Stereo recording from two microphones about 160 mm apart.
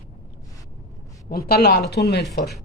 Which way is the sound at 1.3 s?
75° left (ahead or behind).